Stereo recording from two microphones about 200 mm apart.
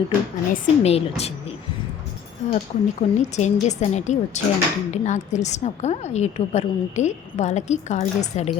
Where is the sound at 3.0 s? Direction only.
35° left (ahead or behind).